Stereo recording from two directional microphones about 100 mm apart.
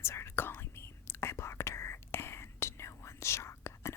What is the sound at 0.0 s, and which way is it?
Whispering, 25° left (ahead or behind).